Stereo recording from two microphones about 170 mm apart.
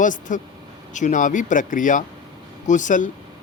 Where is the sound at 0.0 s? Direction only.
50° left (ahead or behind).